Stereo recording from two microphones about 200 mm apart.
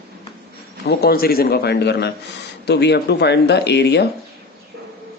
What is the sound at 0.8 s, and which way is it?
A man's voice, 50° left (ahead or behind).